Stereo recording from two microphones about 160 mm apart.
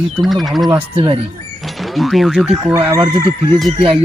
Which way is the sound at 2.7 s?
20° right (ahead or behind).